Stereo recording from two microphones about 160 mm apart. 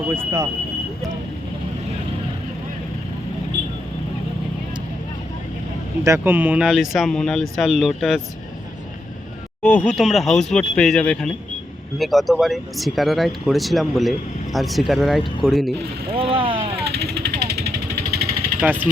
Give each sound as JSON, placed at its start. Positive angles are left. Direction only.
{"t": 0.1, "sound": "speech", "side_deg": -20}
{"t": 6.1, "sound": "speech", "side_deg": -10}
{"t": 9.6, "sound": "speech", "side_deg": 5}
{"t": 16.0, "sound": "vehicle", "side_deg": -35}
{"t": 16.8, "sound": "vehicle", "side_deg": -85}
{"t": 18.6, "sound": "speech", "side_deg": -10}